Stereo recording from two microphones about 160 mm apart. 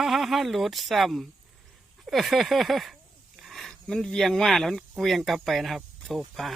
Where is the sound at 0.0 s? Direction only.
Centre (ahead or behind).